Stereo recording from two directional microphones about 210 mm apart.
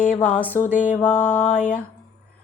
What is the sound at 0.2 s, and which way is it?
Speech, 5° left (ahead or behind).